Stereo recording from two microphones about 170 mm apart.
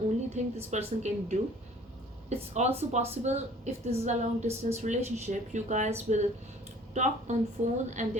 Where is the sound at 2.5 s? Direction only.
40° right (ahead or behind).